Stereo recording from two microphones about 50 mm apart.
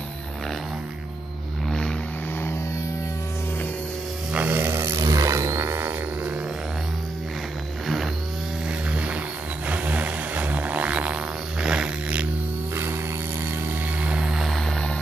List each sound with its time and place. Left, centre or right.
1.7 s vehicle: centre
4.3 s roar: right
4.7 s a sound: right
8.6 s music: right
9.7 s a sound: right
11.6 s zipper: centre
14.0 s vehicle: right
14.3 s vehicle: centre